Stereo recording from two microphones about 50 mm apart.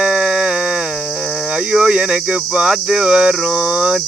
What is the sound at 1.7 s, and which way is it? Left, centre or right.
Speech, centre.